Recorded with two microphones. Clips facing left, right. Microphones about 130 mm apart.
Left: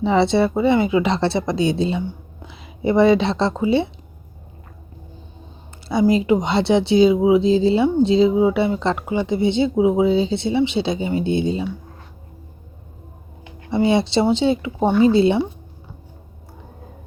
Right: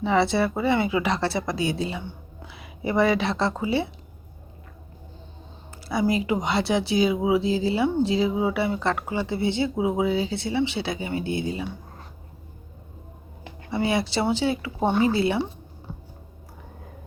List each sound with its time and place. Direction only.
0.0 s speech: 25° left (ahead or behind)
5.9 s speech: 25° left (ahead or behind)
13.7 s speech: 25° left (ahead or behind)